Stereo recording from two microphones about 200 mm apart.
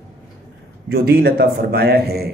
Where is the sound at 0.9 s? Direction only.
50° right (ahead or behind).